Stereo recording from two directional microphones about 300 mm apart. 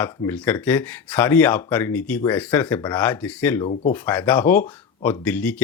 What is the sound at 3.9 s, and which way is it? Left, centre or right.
Speech, centre.